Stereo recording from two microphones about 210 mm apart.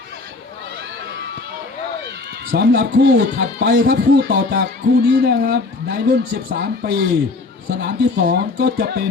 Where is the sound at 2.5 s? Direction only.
45° right (ahead or behind).